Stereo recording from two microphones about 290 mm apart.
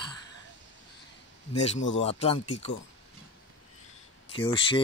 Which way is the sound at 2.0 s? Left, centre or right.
Centre.